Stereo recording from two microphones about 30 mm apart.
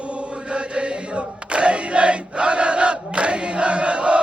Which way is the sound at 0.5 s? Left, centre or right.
Right.